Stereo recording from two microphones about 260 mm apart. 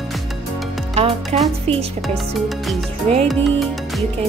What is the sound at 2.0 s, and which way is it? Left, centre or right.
Speech, centre.